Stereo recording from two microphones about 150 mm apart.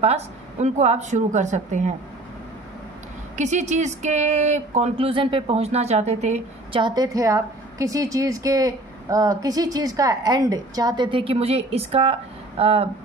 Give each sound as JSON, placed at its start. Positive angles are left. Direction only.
{"t": 0.0, "sound": "a woman's voice", "side_deg": -45}
{"t": 3.3, "sound": "a woman's voice", "side_deg": -50}
{"t": 4.9, "sound": "a woman's voice", "side_deg": -35}
{"t": 6.8, "sound": "a woman's voice", "side_deg": -25}